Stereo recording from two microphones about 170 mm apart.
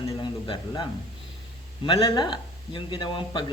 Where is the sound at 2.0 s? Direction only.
25° left (ahead or behind).